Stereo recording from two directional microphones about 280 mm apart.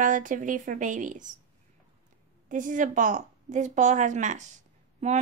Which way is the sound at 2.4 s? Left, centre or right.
Right.